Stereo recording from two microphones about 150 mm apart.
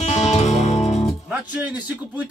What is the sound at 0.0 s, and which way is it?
Music, 45° left (ahead or behind).